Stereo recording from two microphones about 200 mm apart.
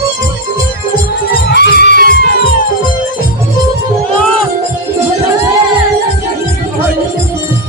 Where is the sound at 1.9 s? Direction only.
45° right (ahead or behind).